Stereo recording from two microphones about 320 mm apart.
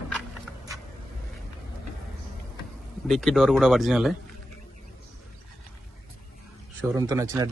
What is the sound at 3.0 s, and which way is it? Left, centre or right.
Speech, centre.